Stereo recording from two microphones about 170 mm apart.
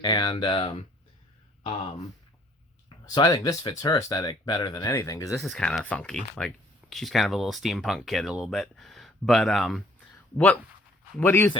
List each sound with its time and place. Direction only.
0.0 s speech: 25° left (ahead or behind)
3.2 s speech: 25° left (ahead or behind)
5.3 s speech: centre (ahead or behind)